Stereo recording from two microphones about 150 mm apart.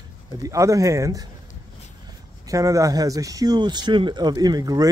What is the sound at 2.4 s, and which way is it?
Speech, 20° right (ahead or behind).